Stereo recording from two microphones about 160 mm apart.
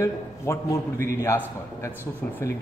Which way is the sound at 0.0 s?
20° left (ahead or behind).